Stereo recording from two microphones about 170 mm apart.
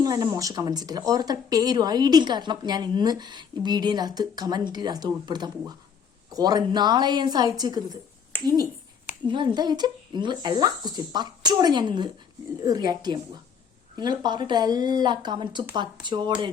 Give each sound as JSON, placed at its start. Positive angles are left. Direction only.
{"t": 0.0, "sound": "speech", "side_deg": -20}
{"t": 8.3, "sound": "speech", "side_deg": 10}
{"t": 9.2, "sound": "speech", "side_deg": -25}